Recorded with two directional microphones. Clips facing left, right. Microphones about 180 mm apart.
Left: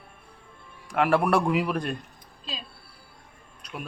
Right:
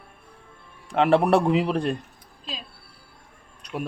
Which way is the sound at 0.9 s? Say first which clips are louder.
Right 4 dB; 25° right (ahead or behind).